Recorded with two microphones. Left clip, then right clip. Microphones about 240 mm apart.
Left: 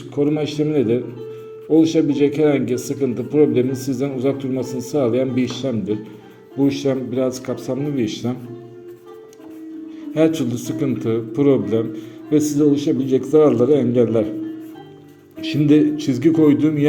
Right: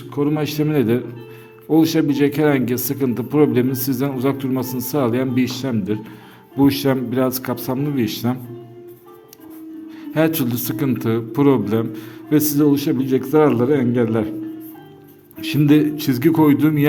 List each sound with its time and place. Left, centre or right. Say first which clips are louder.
0.2 s a man's voice: left 1 dB; right
10.2 s a man's voice: left 1 dB; right
15.4 s a man's voice: even; right